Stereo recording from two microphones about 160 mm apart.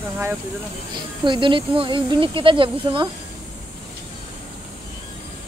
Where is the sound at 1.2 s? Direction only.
30° right (ahead or behind).